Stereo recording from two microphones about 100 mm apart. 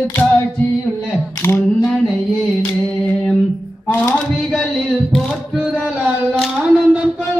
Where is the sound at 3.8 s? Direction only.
15° left (ahead or behind).